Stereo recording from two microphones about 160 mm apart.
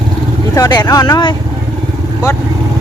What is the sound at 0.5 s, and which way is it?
Speech, 25° left (ahead or behind).